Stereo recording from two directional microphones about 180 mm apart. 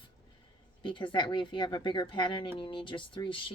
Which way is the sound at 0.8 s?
25° left (ahead or behind).